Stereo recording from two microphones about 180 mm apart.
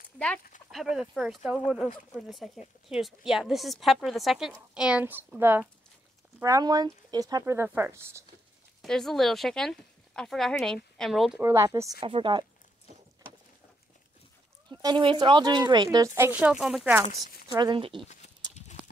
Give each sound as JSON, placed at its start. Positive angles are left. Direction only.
{"t": 0.7, "sound": "a woman's voice", "side_deg": 0}
{"t": 8.8, "sound": "a woman's voice", "side_deg": 0}
{"t": 11.4, "sound": "speech", "side_deg": -15}
{"t": 12.0, "sound": "speech", "side_deg": -25}
{"t": 14.7, "sound": "speech", "side_deg": -25}
{"t": 17.2, "sound": "speech", "side_deg": -20}